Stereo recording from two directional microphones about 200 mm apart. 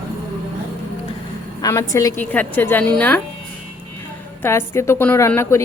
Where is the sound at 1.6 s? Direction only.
15° left (ahead or behind).